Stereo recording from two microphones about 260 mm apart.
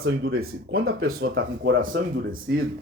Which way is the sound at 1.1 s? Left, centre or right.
Right.